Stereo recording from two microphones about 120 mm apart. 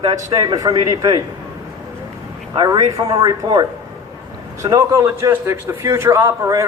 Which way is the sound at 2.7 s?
30° right (ahead or behind).